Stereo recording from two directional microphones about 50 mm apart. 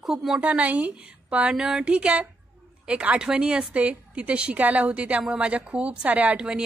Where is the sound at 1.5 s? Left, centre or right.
Centre.